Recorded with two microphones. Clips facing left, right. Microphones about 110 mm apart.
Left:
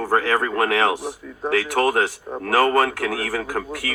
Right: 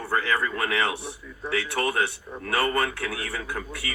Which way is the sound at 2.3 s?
45° left (ahead or behind).